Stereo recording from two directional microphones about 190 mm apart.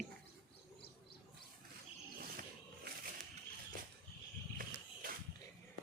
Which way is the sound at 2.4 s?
50° right (ahead or behind).